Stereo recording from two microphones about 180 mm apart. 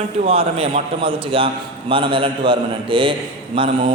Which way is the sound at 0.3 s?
30° right (ahead or behind).